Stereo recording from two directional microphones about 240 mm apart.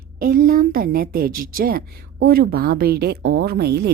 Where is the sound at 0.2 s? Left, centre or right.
Right.